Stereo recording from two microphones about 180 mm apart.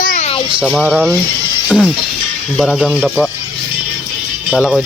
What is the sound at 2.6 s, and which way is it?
Speech, centre (ahead or behind).